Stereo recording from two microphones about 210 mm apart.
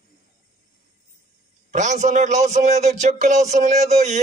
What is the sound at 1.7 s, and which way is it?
Speech, 35° right (ahead or behind).